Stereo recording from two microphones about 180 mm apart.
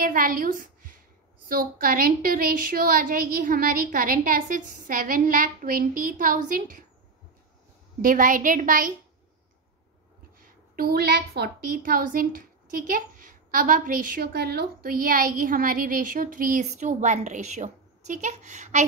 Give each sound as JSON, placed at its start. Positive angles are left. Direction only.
{"t": 0.0, "sound": "a sound", "side_deg": -50}
{"t": 1.5, "sound": "a woman's voice", "side_deg": -50}
{"t": 8.0, "sound": "a woman's voice", "side_deg": -50}
{"t": 10.4, "sound": "a woman's voice", "side_deg": -55}